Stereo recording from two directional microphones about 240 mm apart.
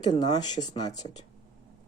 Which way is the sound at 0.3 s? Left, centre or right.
Centre.